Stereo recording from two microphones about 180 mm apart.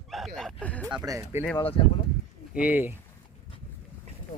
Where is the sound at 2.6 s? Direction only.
10° right (ahead or behind).